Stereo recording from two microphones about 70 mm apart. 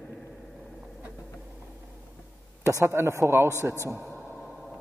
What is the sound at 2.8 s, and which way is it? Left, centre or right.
Speech, right.